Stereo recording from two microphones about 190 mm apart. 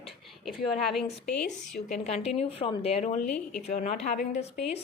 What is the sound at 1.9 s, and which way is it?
A woman's voice, 35° left (ahead or behind).